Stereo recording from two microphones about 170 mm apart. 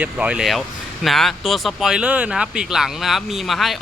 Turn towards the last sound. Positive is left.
turn(degrees=0)  # may be behind; listen again after turning